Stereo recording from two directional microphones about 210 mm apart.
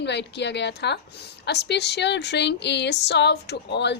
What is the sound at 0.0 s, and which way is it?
A woman's voice, 55° left (ahead or behind).